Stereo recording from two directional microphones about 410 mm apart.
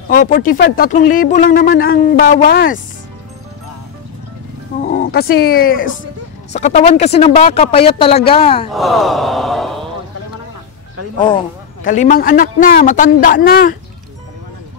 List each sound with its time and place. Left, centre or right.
0.1 s speech: centre
4.8 s speech: left
8.7 s gasp: centre
11.8 s speech: centre